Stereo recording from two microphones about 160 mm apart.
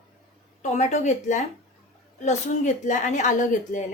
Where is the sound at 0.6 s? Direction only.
45° left (ahead or behind).